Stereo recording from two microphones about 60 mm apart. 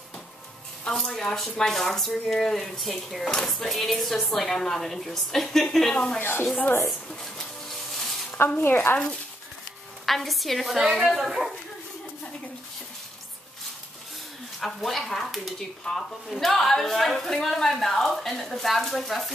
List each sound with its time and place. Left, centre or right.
0.8 s speech: centre
6.1 s speech: left
7.1 s a sound: centre
8.6 s speech: left
10.0 s speech: centre
14.6 s speech: centre